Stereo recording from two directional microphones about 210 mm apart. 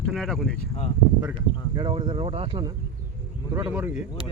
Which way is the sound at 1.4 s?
20° right (ahead or behind).